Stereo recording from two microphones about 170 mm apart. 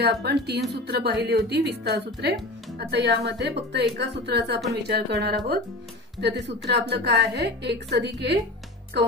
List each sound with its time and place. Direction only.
0.0 s a woman's voice: 75° right (ahead or behind)
4.8 s a woman's voice: 75° right (ahead or behind)